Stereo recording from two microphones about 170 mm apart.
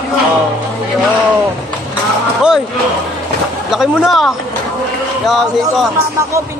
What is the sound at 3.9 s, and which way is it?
Speech, centre (ahead or behind).